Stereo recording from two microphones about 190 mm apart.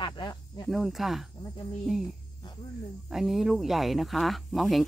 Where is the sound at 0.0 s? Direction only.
25° left (ahead or behind).